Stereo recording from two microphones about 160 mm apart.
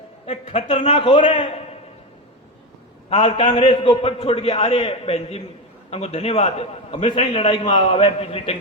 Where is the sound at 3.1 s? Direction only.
45° left (ahead or behind).